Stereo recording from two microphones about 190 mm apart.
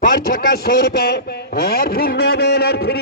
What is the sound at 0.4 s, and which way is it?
A man's voice, 55° left (ahead or behind).